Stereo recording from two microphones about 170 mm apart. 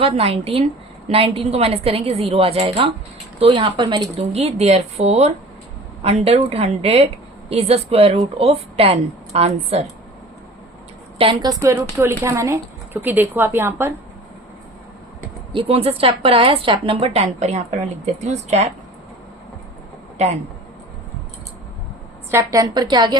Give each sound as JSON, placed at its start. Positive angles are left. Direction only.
{"t": 0.0, "sound": "a woman's voice", "side_deg": -35}
{"t": 11.2, "sound": "a woman's voice", "side_deg": -30}
{"t": 12.2, "sound": "a woman's voice", "side_deg": -15}
{"t": 15.5, "sound": "a woman's voice", "side_deg": -35}
{"t": 22.3, "sound": "a woman's voice", "side_deg": -20}